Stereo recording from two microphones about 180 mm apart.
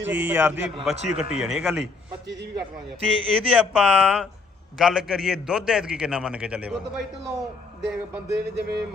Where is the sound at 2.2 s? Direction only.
80° right.